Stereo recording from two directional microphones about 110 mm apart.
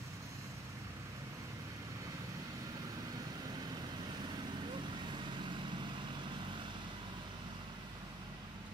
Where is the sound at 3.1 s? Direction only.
35° right (ahead or behind).